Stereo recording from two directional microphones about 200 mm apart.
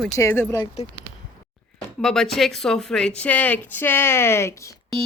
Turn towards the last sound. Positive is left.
turn(degrees=15)  # may be behind; listen again after turning